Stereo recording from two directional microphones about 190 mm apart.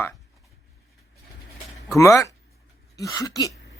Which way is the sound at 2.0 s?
15° left (ahead or behind).